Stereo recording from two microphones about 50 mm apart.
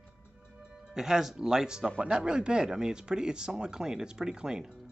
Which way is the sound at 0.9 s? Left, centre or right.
Centre.